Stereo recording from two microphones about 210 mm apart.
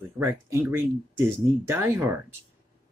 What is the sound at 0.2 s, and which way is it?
Speech, 10° right (ahead or behind).